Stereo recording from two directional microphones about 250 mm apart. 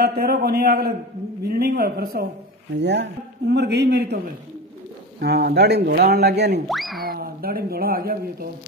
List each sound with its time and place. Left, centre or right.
0.0 s speech: right
5.2 s speech: right
6.7 s speech: centre
7.1 s speech: right